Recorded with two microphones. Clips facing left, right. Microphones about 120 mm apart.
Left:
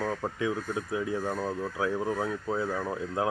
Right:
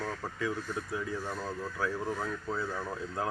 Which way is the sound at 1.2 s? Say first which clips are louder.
Left 6 dB; 45° left (ahead or behind).